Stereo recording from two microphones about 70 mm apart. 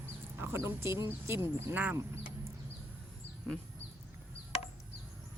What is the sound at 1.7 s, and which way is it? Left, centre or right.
Speech, right.